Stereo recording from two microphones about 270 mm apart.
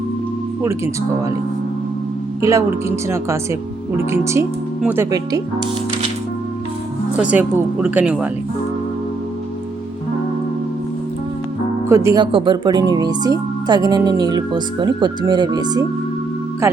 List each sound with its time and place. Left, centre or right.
2.4 s speech: centre
7.2 s speech: centre
11.9 s speech: centre